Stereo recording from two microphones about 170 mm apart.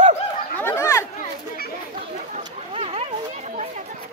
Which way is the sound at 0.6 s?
15° left (ahead or behind).